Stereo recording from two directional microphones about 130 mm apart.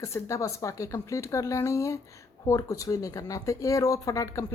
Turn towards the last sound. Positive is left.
turn(degrees=25)  # may be behind; listen again after turning